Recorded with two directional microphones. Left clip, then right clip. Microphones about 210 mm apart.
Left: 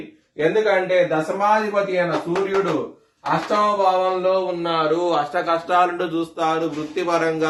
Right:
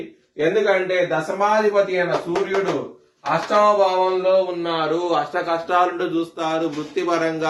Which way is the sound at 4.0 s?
15° left (ahead or behind).